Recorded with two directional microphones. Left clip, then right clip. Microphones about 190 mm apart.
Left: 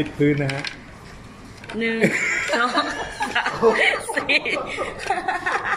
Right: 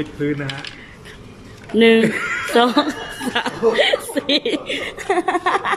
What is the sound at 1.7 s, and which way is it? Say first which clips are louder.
A woman's voice: right 7 dB; 40° right (ahead or behind).